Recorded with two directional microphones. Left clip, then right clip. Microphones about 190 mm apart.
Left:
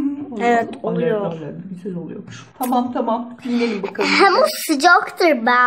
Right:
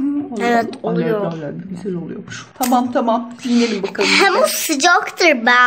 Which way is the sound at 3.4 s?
5° left (ahead or behind).